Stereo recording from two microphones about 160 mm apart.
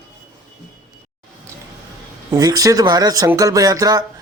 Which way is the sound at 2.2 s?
25° right (ahead or behind).